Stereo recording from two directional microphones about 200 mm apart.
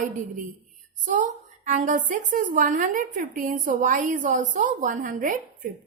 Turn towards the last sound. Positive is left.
turn(degrees=-40)  # may be behind; listen again after turning